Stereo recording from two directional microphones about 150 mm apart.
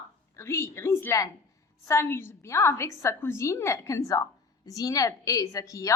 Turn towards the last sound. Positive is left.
turn(degrees=20)  # may be behind; listen again after turning